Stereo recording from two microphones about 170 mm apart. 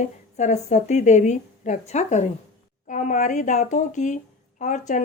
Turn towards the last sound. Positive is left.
turn(degrees=45)  # may be behind; listen again after turning